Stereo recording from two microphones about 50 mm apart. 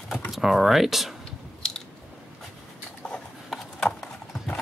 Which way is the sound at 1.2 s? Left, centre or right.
Centre.